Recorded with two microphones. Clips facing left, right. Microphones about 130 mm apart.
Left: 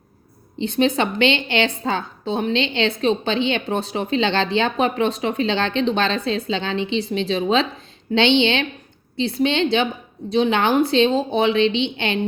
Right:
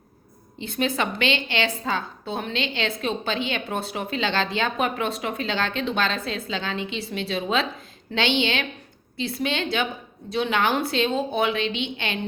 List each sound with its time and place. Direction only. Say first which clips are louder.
0.6 s a woman's voice: left 6 dB; 25° left (ahead or behind)